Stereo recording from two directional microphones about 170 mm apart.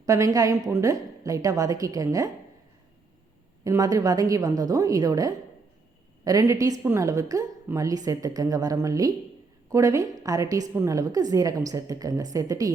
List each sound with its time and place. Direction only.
0.0 s a woman's voice: 20° right (ahead or behind)
3.6 s a woman's voice: 20° right (ahead or behind)